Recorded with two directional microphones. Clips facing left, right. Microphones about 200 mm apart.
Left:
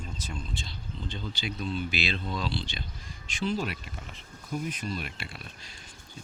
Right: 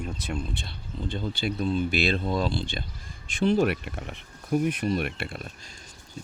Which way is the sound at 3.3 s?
60° right (ahead or behind).